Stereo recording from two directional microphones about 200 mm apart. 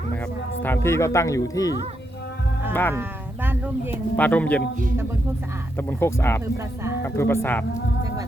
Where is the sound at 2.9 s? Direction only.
10° right (ahead or behind).